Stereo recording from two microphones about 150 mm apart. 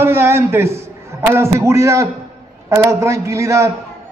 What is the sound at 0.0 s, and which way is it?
A man's voice, 15° right (ahead or behind).